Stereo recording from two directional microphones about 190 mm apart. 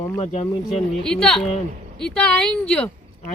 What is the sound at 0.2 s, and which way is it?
Speech, 35° left (ahead or behind).